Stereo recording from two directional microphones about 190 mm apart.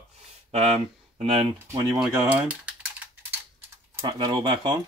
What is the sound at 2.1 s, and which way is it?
Typing, 10° right (ahead or behind).